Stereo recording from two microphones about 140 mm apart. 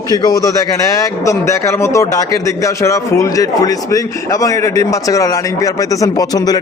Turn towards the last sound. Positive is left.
turn(degrees=25)  # may be behind; listen again after turning